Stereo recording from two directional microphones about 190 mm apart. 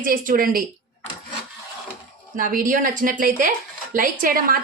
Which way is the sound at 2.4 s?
45° right (ahead or behind).